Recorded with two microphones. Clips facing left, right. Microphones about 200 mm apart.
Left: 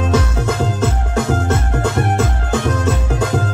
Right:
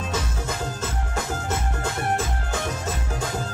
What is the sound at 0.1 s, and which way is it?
Music, 70° left (ahead or behind).